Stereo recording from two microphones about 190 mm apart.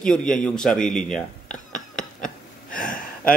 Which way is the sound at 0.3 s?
5° left (ahead or behind).